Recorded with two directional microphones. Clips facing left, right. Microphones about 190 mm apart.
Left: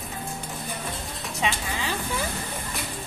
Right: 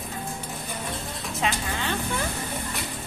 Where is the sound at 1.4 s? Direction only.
Centre (ahead or behind).